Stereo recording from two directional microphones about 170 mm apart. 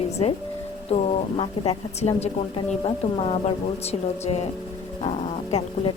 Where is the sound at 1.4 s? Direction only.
40° left (ahead or behind).